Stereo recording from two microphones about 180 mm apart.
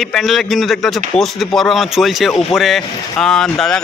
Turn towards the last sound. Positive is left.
turn(degrees=5)  # may be behind; listen again after turning